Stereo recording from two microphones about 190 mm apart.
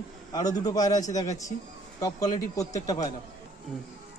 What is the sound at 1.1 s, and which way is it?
Speech, 40° left (ahead or behind).